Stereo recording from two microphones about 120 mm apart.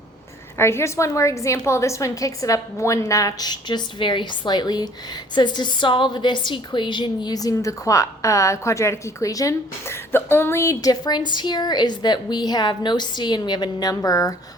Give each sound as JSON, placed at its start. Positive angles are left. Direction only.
{"t": 0.5, "sound": "a woman's voice", "side_deg": 20}